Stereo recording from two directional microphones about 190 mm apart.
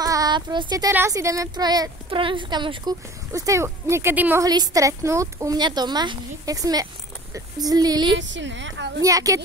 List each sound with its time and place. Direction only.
0.0 s speech: 20° right (ahead or behind)
8.2 s a woman's voice: 75° right (ahead or behind)
9.0 s speech: 15° right (ahead or behind)